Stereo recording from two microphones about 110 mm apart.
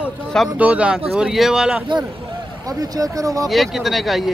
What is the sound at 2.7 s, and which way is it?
Speech, 35° right (ahead or behind).